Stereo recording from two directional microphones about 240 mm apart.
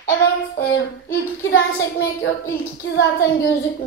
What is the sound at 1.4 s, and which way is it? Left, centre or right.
A woman's voice, left.